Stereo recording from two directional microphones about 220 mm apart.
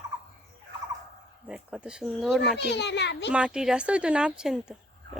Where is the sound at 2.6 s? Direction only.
50° left (ahead or behind).